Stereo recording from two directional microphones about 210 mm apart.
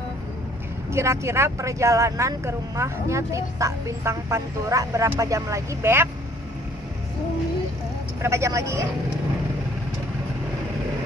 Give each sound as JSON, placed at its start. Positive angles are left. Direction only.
{"t": 0.9, "sound": "speech", "side_deg": -15}
{"t": 8.2, "sound": "speech", "side_deg": -15}